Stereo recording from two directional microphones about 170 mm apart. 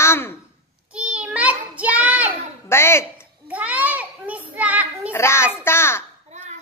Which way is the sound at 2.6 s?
15° left (ahead or behind).